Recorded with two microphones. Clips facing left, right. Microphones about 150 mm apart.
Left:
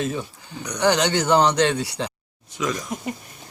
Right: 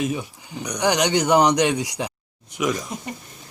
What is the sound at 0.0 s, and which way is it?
Speech, 15° right (ahead or behind).